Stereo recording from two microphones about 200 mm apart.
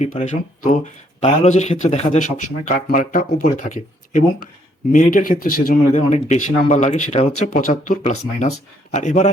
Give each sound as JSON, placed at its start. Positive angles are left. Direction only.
{"t": 0.0, "sound": "speech", "side_deg": 35}